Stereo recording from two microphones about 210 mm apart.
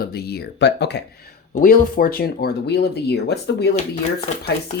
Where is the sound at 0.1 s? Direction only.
50° left (ahead or behind).